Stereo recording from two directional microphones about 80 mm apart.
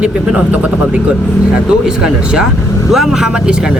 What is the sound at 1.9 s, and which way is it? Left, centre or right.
Speech, centre.